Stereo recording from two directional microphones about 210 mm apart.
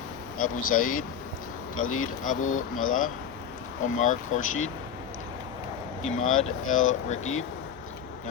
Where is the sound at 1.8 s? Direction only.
90° left.